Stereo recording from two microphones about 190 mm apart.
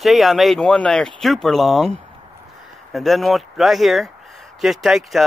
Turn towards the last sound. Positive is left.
turn(degrees=0)  # may be behind; listen again after turning